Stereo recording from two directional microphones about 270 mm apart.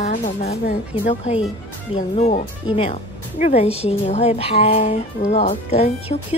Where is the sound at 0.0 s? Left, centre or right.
Left.